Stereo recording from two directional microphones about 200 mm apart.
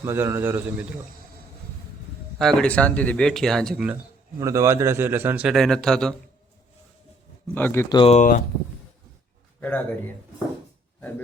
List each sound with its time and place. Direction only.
0.0 s a man's voice: 15° right (ahead or behind)
2.4 s speech: 5° left (ahead or behind)
4.4 s a man's voice: 15° right (ahead or behind); by 6.1 s 5° left (ahead or behind)
7.5 s speech: 10° left (ahead or behind); by 8.4 s 35° left (ahead or behind)
9.6 s speech: 10° left (ahead or behind)